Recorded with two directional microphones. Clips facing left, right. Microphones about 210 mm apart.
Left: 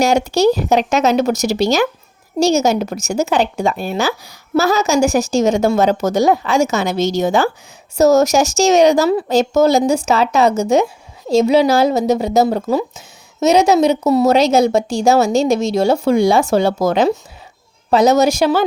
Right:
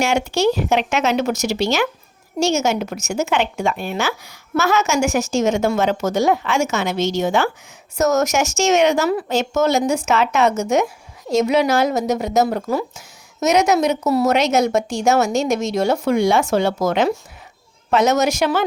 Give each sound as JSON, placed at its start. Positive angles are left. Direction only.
{"t": 0.0, "sound": "a woman's voice", "side_deg": 40}